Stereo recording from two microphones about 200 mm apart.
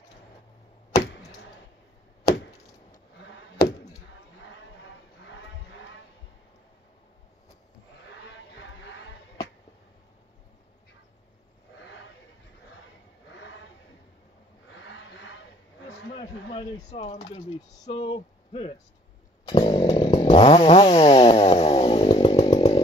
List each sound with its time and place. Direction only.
16.5 s speech: 30° left (ahead or behind)
19.5 s chainsaw: 30° left (ahead or behind)